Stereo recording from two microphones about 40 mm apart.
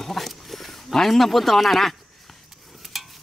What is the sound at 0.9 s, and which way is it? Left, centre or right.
Speech, centre.